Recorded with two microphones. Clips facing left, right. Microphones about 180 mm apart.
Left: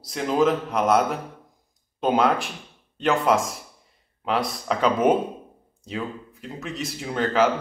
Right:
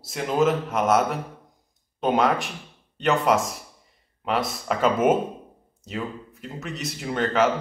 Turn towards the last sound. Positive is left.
turn(degrees=0)  # may be behind; listen again after turning